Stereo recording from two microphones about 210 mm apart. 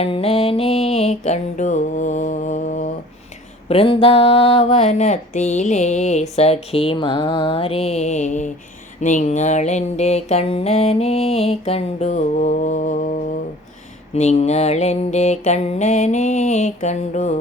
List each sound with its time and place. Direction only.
0.0 s music: 30° left (ahead or behind)
6.3 s mantra: 30° left (ahead or behind)
9.0 s music: 35° left (ahead or behind)